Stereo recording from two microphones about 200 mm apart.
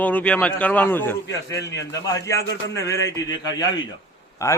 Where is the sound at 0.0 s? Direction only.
5° left (ahead or behind).